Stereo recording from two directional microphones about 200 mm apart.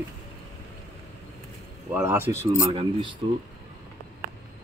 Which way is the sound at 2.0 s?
10° right (ahead or behind).